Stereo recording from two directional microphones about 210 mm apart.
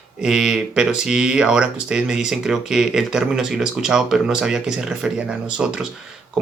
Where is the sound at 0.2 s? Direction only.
5° right (ahead or behind).